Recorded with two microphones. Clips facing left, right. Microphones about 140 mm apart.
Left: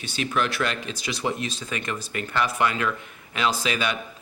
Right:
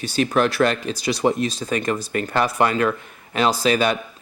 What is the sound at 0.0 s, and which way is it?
Speech, 40° right (ahead or behind).